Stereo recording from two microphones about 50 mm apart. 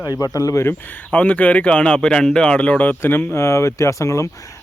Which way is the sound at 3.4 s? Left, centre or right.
Left.